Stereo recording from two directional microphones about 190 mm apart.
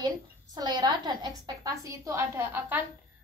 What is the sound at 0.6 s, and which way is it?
A woman's voice, 20° right (ahead or behind).